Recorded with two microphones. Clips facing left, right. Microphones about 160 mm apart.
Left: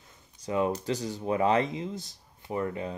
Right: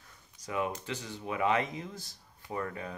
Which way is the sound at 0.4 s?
30° left (ahead or behind).